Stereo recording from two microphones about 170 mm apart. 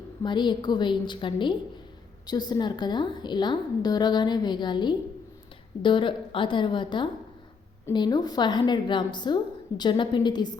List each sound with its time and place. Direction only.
0.2 s a woman's voice: 25° left (ahead or behind)